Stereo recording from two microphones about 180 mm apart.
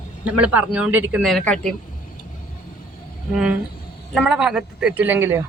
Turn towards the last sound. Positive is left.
turn(degrees=-10)  # may be behind; listen again after turning